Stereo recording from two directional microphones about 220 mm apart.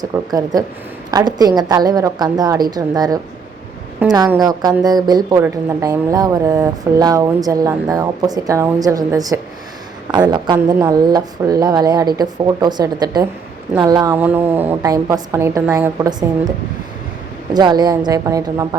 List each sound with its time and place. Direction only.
0.0 s a woman's voice: 15° right (ahead or behind)
17.5 s a woman's voice: 20° right (ahead or behind)